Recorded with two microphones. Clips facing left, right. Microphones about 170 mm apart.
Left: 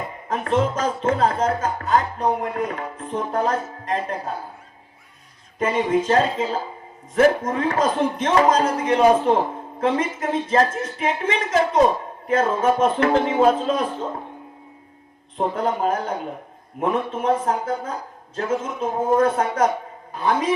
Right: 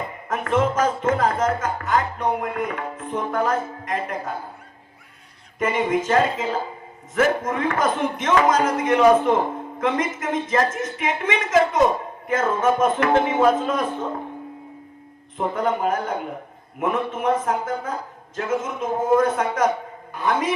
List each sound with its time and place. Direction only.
0.3 s speech: 30° left (ahead or behind)
5.5 s speech: 30° left (ahead or behind)
15.4 s speech: 30° left (ahead or behind)